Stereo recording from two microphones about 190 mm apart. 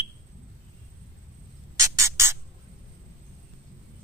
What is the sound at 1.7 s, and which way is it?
Music, 15° right (ahead or behind).